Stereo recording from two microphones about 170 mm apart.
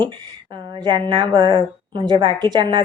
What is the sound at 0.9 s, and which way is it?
Speech, 25° right (ahead or behind).